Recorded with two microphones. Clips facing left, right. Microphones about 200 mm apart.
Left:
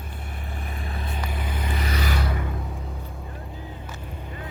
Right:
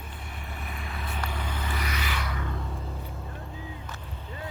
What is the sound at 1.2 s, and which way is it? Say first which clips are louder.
Vehicle: left 1 dB; 10° left (ahead or behind).